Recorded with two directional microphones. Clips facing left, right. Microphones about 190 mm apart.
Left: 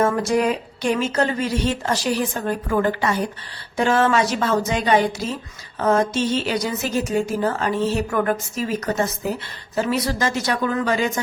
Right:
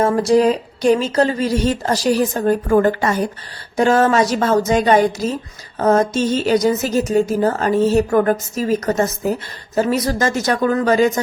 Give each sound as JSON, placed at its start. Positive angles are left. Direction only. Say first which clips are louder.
{"t": 0.0, "sound": "a woman's voice", "louder": "right 5 dB", "side_deg": -35}